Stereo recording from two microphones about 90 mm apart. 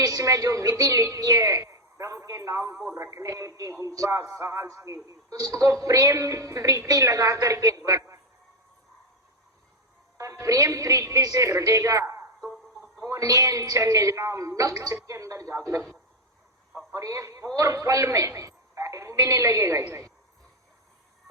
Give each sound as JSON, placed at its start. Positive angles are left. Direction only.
{"t": 0.0, "sound": "a woman's voice", "side_deg": -40}
{"t": 10.2, "sound": "a woman's voice", "side_deg": -35}
{"t": 16.9, "sound": "a man's voice", "side_deg": -40}